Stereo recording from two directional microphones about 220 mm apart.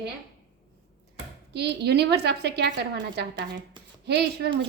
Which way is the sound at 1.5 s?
50° right (ahead or behind).